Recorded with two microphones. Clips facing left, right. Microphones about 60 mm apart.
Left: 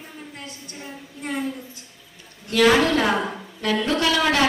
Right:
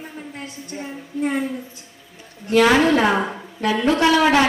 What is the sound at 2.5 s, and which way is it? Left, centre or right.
A woman's voice, right.